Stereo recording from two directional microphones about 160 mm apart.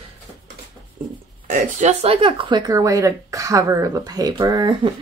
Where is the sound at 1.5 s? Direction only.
55° right (ahead or behind); by 4.9 s 25° right (ahead or behind).